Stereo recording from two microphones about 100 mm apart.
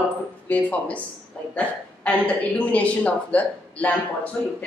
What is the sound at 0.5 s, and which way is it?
A woman's voice, 15° left (ahead or behind).